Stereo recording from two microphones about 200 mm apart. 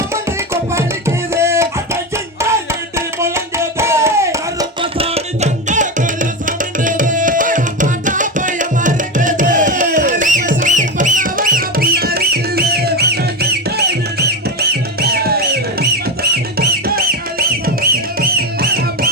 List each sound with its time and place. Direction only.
0.1 s music: 15° right (ahead or behind)
2.4 s a sound: 15° right (ahead or behind)
4.8 s music: 30° right (ahead or behind); by 18.9 s 50° right (ahead or behind)